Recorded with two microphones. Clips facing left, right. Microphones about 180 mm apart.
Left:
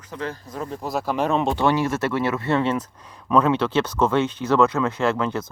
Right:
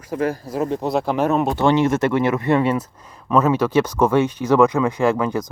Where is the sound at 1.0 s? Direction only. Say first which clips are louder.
Even; 10° right (ahead or behind).